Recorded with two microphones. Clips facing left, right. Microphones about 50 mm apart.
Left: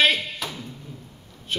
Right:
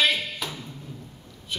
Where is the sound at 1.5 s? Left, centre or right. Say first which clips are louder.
Left 5 dB; left.